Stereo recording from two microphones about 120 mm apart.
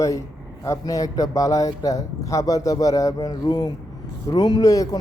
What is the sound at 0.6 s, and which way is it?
Speech, 25° left (ahead or behind).